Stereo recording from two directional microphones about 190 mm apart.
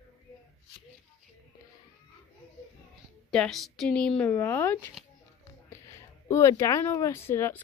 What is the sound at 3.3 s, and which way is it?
Speech, centre (ahead or behind).